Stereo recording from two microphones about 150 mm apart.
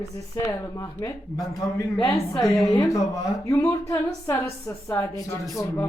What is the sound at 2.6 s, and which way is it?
A woman's voice, 20° left (ahead or behind).